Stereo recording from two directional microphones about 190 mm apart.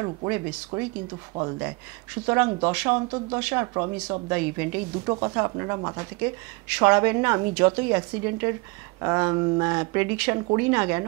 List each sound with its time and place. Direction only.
0.0 s speech: 25° right (ahead or behind)
3.0 s speech: 25° right (ahead or behind)
3.3 s speech: 10° right (ahead or behind)
3.6 s speech: 20° right (ahead or behind)